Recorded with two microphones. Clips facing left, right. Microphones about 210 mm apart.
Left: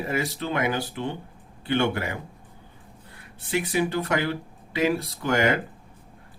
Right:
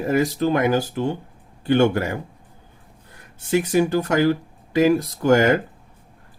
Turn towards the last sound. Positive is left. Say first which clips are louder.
# right 7 dB
turn(degrees=-45)  # may be behind; listen again after turning